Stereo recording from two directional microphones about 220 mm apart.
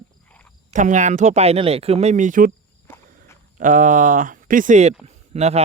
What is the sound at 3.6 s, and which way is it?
Speech, 35° right (ahead or behind).